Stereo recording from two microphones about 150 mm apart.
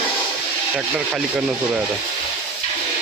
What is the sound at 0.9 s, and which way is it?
Speech, 5° right (ahead or behind).